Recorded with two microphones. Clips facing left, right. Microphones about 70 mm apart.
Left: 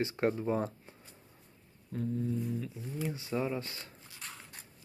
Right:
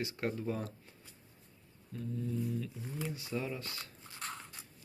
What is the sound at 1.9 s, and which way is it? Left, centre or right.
Speech, left.